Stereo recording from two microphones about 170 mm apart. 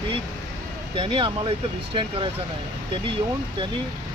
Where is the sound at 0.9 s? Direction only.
30° right (ahead or behind).